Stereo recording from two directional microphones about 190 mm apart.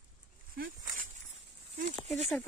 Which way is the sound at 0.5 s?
45° right (ahead or behind).